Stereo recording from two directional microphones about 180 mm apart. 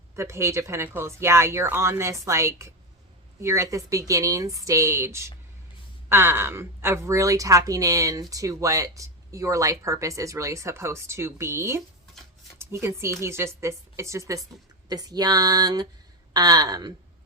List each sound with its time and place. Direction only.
0.2 s a woman's voice: 15° right (ahead or behind)